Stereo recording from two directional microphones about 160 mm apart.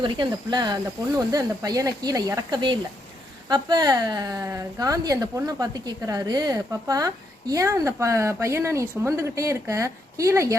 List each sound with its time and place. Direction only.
0.0 s speech: 25° right (ahead or behind)